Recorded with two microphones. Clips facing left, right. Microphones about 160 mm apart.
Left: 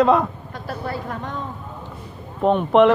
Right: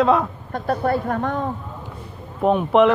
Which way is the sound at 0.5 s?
55° right (ahead or behind).